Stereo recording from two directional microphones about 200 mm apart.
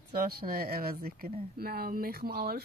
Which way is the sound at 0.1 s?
50° right (ahead or behind).